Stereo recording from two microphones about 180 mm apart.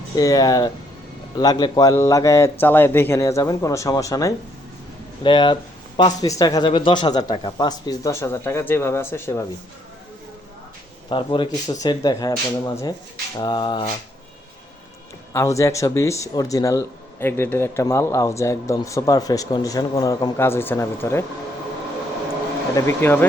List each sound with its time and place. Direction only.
0.2 s speech: 20° left (ahead or behind)
11.1 s speech: 30° left (ahead or behind)
15.3 s speech: 15° left (ahead or behind)
22.7 s speech: 15° left (ahead or behind)